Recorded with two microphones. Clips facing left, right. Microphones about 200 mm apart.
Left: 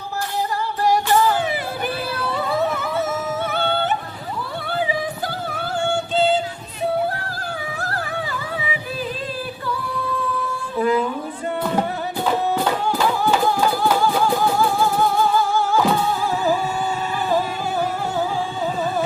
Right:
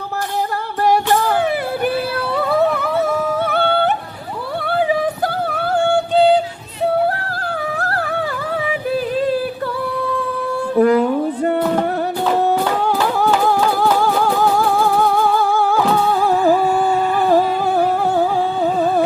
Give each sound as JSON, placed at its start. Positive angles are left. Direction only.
{"t": 0.9, "sound": "music", "side_deg": -60}
{"t": 10.8, "sound": "a sound", "side_deg": -60}
{"t": 12.4, "sound": "music", "side_deg": -60}
{"t": 14.9, "sound": "music", "side_deg": -60}